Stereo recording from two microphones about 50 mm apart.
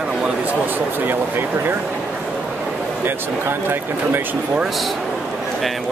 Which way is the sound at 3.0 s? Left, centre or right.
Right.